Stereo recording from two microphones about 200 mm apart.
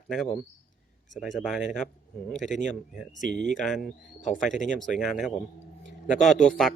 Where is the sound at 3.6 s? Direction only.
Centre (ahead or behind).